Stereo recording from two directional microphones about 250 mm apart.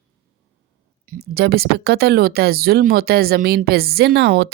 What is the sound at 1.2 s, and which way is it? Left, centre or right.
Speech, right.